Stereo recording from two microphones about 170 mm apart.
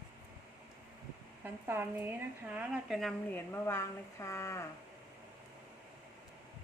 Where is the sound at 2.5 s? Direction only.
10° right (ahead or behind).